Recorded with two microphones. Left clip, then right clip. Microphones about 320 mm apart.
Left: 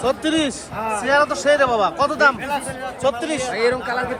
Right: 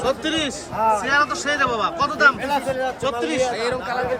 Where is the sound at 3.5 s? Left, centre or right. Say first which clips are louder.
Left 4 dB; left.